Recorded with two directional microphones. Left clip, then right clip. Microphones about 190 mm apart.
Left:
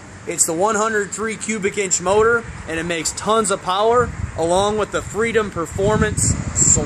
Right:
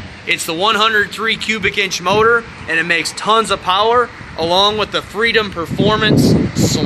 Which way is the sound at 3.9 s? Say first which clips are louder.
Right 3 dB; 50° left (ahead or behind).